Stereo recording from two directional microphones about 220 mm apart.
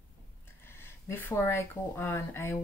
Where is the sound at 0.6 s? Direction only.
10° left (ahead or behind).